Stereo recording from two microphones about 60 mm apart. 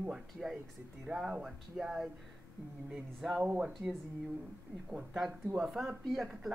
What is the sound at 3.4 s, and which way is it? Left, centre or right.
Speech, centre.